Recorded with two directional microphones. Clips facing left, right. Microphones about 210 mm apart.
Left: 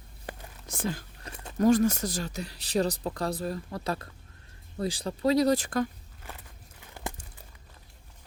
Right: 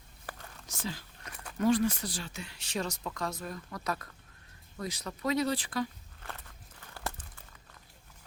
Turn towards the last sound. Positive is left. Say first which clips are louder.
# left 2 dB
turn(degrees=15)  # may be behind; listen again after turning